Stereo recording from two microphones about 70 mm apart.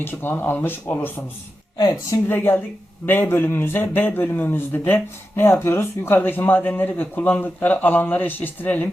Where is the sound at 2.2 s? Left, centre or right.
Left.